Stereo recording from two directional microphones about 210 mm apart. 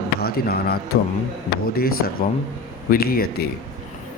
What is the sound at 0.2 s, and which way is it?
Speech, 45° left (ahead or behind).